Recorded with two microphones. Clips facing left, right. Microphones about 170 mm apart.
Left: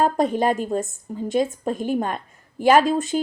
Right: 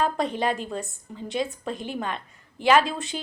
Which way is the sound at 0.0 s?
45° left (ahead or behind).